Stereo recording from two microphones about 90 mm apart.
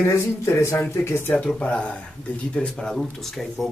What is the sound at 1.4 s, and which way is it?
Speech, 10° left (ahead or behind).